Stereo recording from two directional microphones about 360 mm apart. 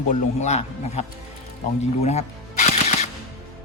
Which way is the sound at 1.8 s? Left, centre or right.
Centre.